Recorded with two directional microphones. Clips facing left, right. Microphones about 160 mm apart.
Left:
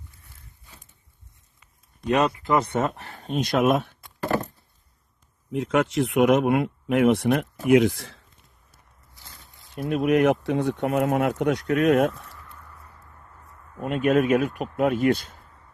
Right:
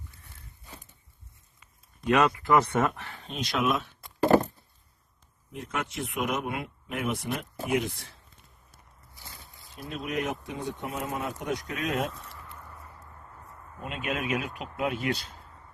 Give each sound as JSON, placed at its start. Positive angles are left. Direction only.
{"t": 2.0, "sound": "speech", "side_deg": 30}
{"t": 2.4, "sound": "speech", "side_deg": 20}
{"t": 3.0, "sound": "speech", "side_deg": 45}
{"t": 5.5, "sound": "speech", "side_deg": 90}
{"t": 9.9, "sound": "speech", "side_deg": 65}
{"t": 13.8, "sound": "speech", "side_deg": 50}